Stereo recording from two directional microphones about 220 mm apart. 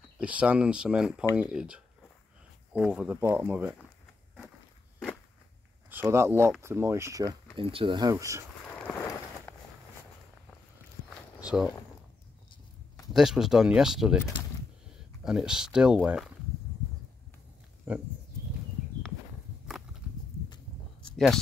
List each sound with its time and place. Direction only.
0.2 s speech: 5° right (ahead or behind)
5.9 s speech: 10° right (ahead or behind)
8.7 s a sound: 5° left (ahead or behind)
13.1 s speech: centre (ahead or behind)
15.2 s speech: centre (ahead or behind)
17.9 s speech: 10° right (ahead or behind)